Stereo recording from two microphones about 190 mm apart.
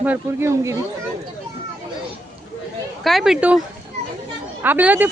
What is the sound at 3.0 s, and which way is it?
Speech, centre (ahead or behind).